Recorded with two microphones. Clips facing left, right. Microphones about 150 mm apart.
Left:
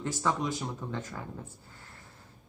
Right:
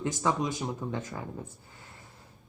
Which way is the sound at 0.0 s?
15° right (ahead or behind).